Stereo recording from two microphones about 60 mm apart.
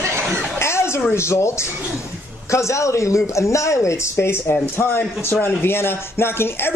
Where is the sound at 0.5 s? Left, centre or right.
Left.